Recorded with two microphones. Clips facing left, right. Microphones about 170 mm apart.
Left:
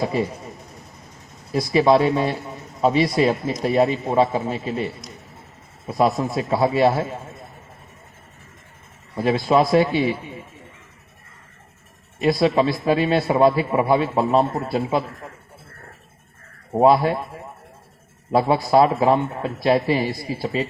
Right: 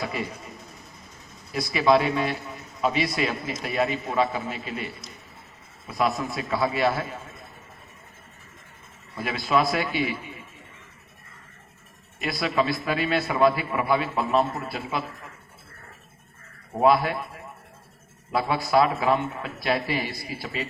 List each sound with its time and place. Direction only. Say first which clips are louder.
0.0 s a man's voice: left 8 dB; 30° left (ahead or behind)
1.7 s a man's voice: left 5 dB; 30° left (ahead or behind)
5.9 s a man's voice: left 6 dB; 30° left (ahead or behind)
9.1 s a man's voice: left 6 dB; 30° left (ahead or behind)
12.2 s a man's voice: left 8 dB; 30° left (ahead or behind)
16.7 s a man's voice: left 5 dB; 30° left (ahead or behind)